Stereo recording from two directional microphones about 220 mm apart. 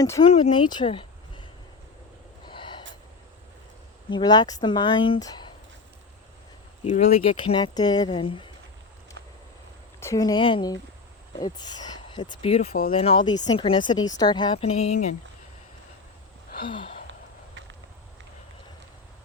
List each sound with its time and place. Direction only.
0.0 s speech: 20° left (ahead or behind)
2.5 s gasp: 20° left (ahead or behind)
4.1 s speech: 20° left (ahead or behind)
6.8 s speech: 30° left (ahead or behind)
10.0 s speech: 15° left (ahead or behind); by 15.1 s 30° left (ahead or behind)
16.6 s speech: 25° left (ahead or behind)